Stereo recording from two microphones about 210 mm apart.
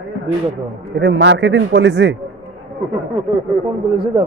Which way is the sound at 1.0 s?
55° right (ahead or behind).